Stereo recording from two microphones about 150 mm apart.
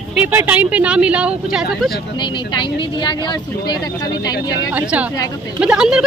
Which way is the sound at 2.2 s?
30° left (ahead or behind).